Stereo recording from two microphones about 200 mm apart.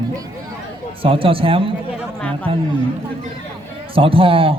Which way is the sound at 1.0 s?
25° right (ahead or behind).